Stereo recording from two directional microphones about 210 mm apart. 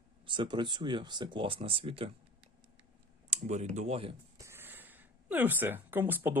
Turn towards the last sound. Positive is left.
turn(degrees=-10)  # may be behind; listen again after turning